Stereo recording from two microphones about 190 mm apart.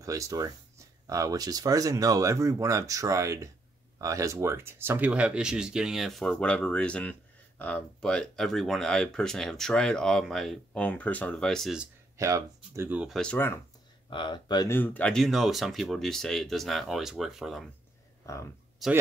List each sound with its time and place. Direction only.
0.0 s speech: 15° right (ahead or behind); by 11.9 s centre (ahead or behind)
12.2 s speech: 15° right (ahead or behind); by 13.6 s 10° left (ahead or behind)
14.1 s speech: 25° left (ahead or behind)
14.8 s speech: 5° left (ahead or behind)
18.2 s speech: 15° left (ahead or behind)
18.8 s speech: centre (ahead or behind)